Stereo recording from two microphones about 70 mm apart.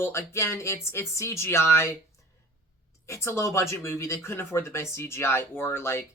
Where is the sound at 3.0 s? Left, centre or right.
Left.